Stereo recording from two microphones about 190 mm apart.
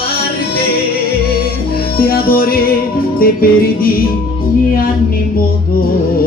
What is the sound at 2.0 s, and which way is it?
Music, 50° left (ahead or behind).